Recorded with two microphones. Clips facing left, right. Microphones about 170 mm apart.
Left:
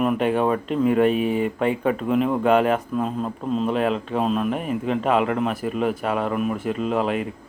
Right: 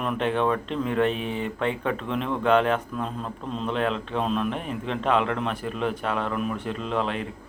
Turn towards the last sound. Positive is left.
turn(degrees=5)  # may be behind; listen again after turning